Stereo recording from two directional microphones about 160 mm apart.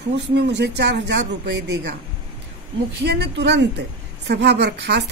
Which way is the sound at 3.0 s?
90° right.